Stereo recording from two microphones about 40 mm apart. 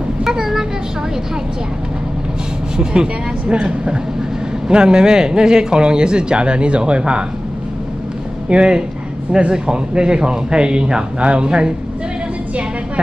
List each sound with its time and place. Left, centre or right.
0.2 s vehicle: centre
2.8 s speech: right
8.5 s speech: right